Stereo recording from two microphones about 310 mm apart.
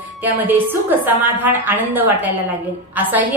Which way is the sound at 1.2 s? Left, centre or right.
Centre.